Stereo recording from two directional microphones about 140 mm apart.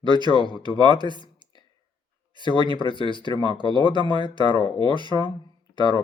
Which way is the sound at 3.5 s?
35° left (ahead or behind).